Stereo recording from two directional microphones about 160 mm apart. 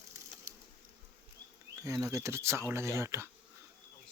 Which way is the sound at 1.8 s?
20° right (ahead or behind).